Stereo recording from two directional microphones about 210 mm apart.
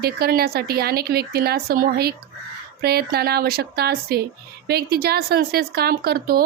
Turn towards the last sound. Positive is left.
turn(degrees=-45)  # may be behind; listen again after turning